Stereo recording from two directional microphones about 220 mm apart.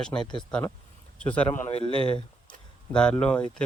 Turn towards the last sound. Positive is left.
turn(degrees=5)  # may be behind; listen again after turning